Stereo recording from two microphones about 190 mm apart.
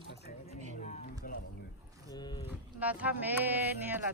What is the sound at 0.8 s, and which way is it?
Speech, 40° left (ahead or behind).